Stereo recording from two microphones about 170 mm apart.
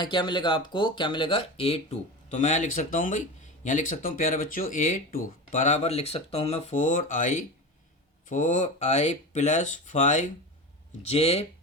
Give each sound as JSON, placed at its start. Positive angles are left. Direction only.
{"t": 0.0, "sound": "speech", "side_deg": 30}